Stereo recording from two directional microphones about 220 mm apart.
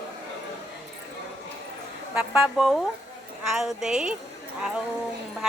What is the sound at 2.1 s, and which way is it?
Speech, centre (ahead or behind).